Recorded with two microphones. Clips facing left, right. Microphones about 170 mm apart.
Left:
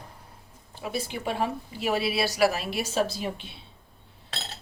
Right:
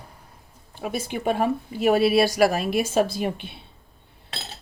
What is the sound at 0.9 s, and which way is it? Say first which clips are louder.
A woman's voice: right 5 dB; 50° right (ahead or behind).